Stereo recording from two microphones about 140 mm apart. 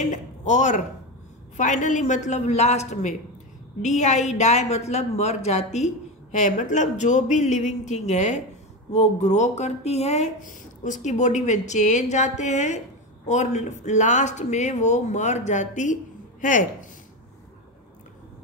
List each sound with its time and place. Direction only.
0.1 s a woman's voice: 60° left (ahead or behind)